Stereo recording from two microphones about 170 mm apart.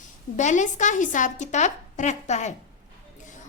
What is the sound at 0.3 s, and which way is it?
A woman's voice, 45° left (ahead or behind).